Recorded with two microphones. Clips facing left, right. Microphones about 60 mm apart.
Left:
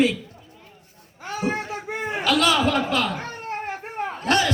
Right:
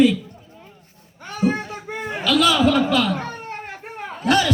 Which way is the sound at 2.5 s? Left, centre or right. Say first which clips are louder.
Right 4 dB; left.